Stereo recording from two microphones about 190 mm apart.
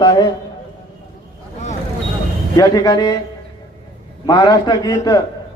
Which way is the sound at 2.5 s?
20° left (ahead or behind).